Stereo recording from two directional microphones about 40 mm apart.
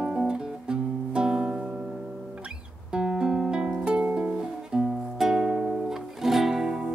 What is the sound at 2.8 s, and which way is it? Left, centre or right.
Music, right.